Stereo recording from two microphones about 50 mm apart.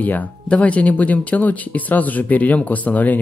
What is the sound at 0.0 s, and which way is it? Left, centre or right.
Speech, left.